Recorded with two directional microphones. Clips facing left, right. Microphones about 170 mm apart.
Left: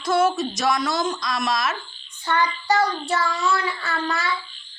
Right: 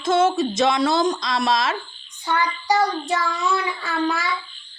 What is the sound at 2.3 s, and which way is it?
Child singing, 10° right (ahead or behind).